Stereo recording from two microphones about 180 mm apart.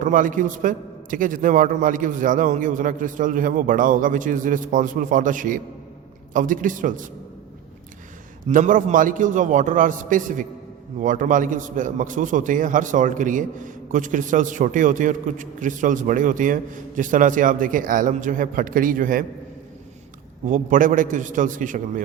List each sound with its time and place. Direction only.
0.0 s a man's voice: 45° right (ahead or behind)
8.4 s a man's voice: 45° right (ahead or behind)
20.4 s a man's voice: 45° right (ahead or behind)